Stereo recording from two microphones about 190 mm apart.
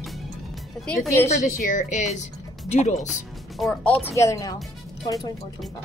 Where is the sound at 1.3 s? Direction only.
40° left (ahead or behind).